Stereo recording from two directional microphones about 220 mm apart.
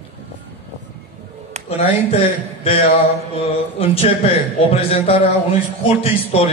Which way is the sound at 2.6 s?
25° left (ahead or behind).